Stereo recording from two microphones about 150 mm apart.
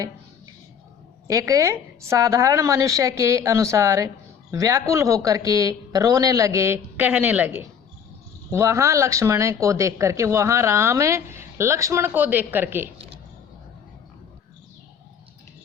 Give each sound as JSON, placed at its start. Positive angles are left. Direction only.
{"t": 1.3, "sound": "speech", "side_deg": -20}